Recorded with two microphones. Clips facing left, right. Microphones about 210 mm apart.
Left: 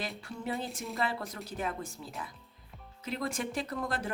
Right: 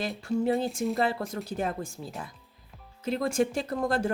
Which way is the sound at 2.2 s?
45° right (ahead or behind).